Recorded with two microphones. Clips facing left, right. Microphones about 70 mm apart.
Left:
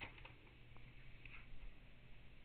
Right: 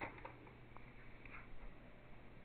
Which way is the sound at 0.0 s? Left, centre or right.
Right.